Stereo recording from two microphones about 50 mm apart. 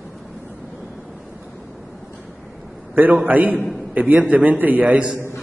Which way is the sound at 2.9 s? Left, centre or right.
Right.